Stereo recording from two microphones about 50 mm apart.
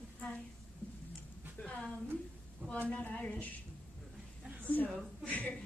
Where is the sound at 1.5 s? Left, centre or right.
Left.